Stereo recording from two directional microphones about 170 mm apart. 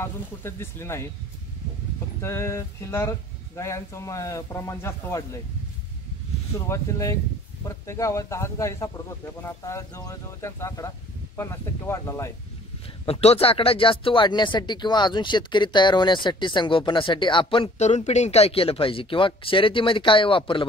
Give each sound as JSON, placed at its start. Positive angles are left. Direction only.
{"t": 0.0, "sound": "speech", "side_deg": 15}
{"t": 2.2, "sound": "speech", "side_deg": 15}
{"t": 6.5, "sound": "speech", "side_deg": 20}
{"t": 13.0, "sound": "speech", "side_deg": 35}